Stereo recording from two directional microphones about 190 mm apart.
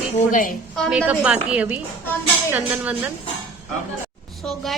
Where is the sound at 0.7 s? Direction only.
Centre (ahead or behind).